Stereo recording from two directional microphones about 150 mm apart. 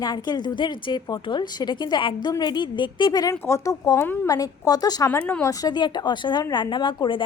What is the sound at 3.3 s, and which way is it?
A woman's voice, 20° left (ahead or behind).